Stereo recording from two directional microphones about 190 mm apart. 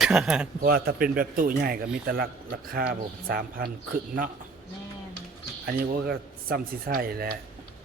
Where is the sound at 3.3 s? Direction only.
50° right (ahead or behind).